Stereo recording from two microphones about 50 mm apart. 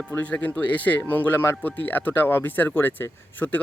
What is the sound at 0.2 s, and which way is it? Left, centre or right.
Speech, left.